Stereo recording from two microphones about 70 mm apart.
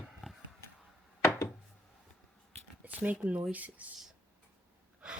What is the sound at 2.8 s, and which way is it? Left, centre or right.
Speech, right.